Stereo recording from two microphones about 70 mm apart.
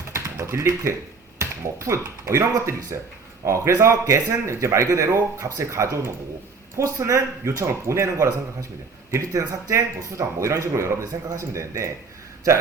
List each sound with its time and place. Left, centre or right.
0.1 s typing: right
1.4 s speech: right
2.9 s speech: right
3.4 s speech: right